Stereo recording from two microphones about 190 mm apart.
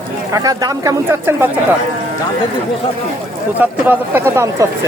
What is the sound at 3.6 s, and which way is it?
Speech, 10° right (ahead or behind).